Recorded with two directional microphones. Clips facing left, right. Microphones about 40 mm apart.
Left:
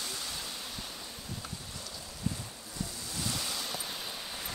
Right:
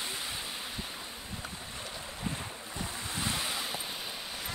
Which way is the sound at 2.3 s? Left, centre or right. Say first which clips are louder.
Left 1 dB; right.